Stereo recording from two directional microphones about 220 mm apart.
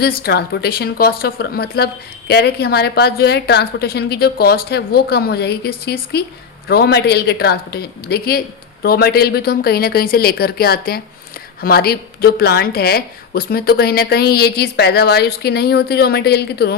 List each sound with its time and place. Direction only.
0.0 s speech: 45° left (ahead or behind)